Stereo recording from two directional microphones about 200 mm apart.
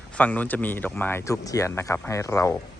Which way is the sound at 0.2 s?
10° left (ahead or behind).